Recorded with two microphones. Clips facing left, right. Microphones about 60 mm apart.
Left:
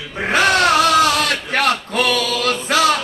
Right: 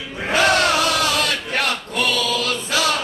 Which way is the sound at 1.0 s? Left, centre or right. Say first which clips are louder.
Left 5 dB; left.